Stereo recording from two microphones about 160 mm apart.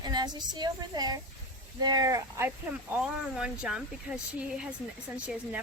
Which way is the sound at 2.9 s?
5° right (ahead or behind).